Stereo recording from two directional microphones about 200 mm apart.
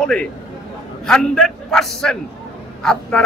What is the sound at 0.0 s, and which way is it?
Speech, 5° left (ahead or behind).